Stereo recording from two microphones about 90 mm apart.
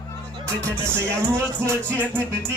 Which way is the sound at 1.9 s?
25° right (ahead or behind).